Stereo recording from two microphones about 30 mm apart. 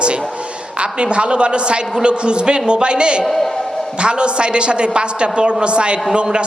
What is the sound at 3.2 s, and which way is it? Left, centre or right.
Speech, centre.